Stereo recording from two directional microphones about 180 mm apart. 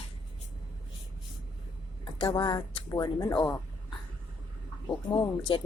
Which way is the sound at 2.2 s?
30° left (ahead or behind).